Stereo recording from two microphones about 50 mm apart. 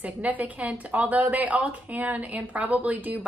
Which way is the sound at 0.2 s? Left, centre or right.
Right.